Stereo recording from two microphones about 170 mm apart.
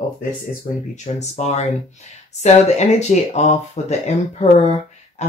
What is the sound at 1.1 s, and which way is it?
Speech, 40° left (ahead or behind).